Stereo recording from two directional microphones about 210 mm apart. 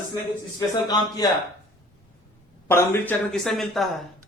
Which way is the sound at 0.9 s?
20° left (ahead or behind).